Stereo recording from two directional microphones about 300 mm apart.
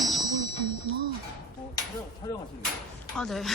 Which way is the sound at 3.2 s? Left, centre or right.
Centre.